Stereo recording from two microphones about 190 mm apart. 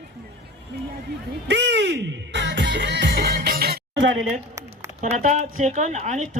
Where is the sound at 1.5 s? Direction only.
65° right (ahead or behind).